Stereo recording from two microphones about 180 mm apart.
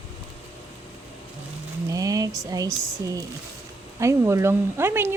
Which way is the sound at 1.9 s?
20° right (ahead or behind).